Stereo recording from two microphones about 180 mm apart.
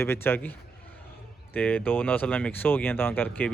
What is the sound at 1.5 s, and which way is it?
Speech, 10° left (ahead or behind).